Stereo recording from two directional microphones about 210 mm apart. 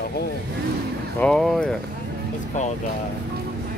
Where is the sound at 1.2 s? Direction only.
Centre (ahead or behind).